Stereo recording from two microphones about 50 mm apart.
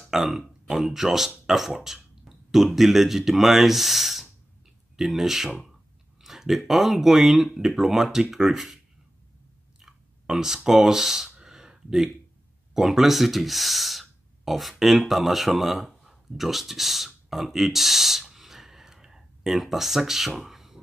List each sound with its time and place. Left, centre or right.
0.0 s speech: centre
9.8 s a sound: centre
12.7 s speech: centre